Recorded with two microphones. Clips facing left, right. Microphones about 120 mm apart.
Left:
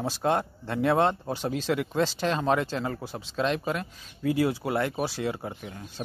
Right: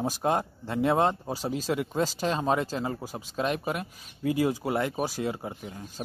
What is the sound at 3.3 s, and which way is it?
Speech, 10° right (ahead or behind).